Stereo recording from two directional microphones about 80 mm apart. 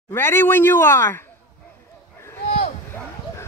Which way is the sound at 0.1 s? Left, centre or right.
Left.